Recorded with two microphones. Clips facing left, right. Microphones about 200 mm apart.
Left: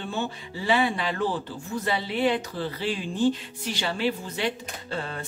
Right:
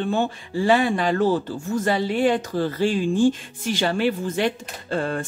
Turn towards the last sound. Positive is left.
turn(degrees=-50)  # may be behind; listen again after turning